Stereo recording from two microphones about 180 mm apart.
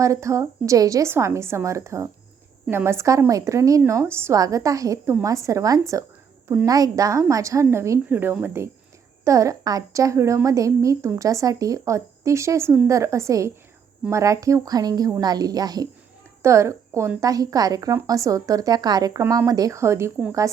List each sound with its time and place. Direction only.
0.0 s a woman's voice: 15° right (ahead or behind)